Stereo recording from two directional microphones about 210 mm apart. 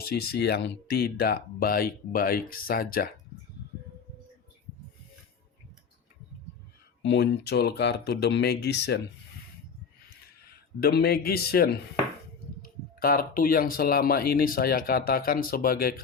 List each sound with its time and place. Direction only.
0.1 s speech: 50° left (ahead or behind)
7.0 s speech: 55° left (ahead or behind)
10.8 s speech: 50° left (ahead or behind)